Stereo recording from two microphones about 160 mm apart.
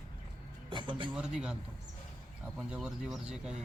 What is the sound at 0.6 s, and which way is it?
Speech, 30° right (ahead or behind).